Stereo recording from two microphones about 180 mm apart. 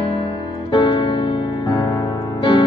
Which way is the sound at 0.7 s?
25° left (ahead or behind).